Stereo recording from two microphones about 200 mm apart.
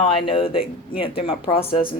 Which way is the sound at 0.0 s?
25° left (ahead or behind).